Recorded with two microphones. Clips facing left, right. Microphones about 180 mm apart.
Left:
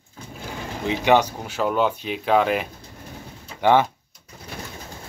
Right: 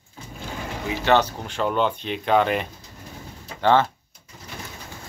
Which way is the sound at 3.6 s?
15° left (ahead or behind).